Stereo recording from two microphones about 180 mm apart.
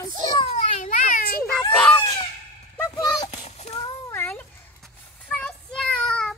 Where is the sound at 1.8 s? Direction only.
5° left (ahead or behind).